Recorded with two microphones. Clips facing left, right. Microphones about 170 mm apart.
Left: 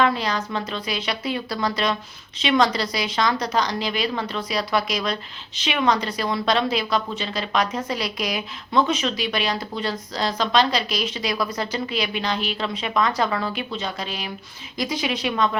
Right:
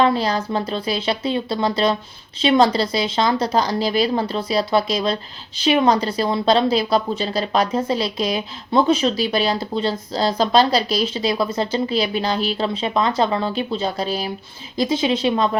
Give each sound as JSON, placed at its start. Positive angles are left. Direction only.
{"t": 0.0, "sound": "a woman's voice", "side_deg": -35}